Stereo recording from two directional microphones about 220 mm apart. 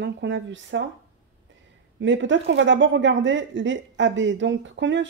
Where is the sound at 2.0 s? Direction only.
55° right (ahead or behind).